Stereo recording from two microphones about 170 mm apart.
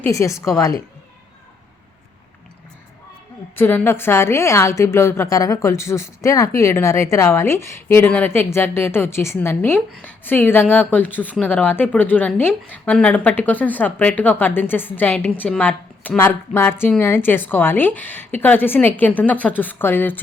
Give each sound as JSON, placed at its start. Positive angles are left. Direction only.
{"t": 0.0, "sound": "a woman's voice", "side_deg": 15}
{"t": 3.5, "sound": "a woman's voice", "side_deg": 10}